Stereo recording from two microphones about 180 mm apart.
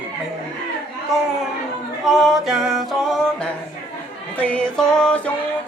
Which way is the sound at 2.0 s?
Centre (ahead or behind).